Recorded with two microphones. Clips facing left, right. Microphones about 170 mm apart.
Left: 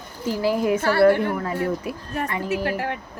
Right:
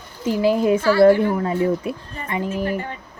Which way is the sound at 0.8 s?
60° left (ahead or behind).